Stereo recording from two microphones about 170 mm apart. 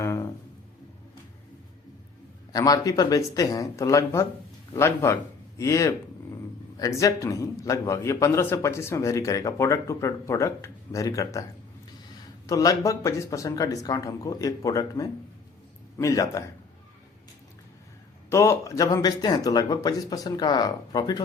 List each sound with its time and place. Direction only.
0.0 s a sound: 15° left (ahead or behind)
2.5 s speech: 20° left (ahead or behind)
12.5 s speech: 20° left (ahead or behind)
18.3 s speech: 15° left (ahead or behind)